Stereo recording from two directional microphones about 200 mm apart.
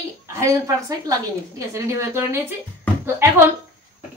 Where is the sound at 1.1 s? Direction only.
15° right (ahead or behind).